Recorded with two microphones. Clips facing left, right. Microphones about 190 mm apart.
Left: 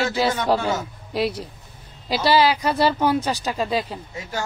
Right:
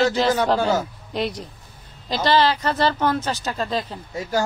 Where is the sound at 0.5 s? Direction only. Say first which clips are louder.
Right 3 dB; 35° right (ahead or behind).